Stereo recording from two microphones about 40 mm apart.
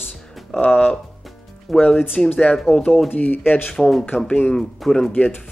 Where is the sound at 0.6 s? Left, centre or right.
Left.